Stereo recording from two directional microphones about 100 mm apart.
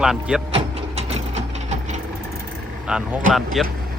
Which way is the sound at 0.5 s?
90° right.